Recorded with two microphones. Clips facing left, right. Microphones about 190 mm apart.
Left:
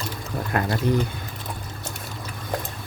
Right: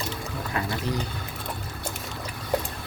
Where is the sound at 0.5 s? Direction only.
55° left (ahead or behind).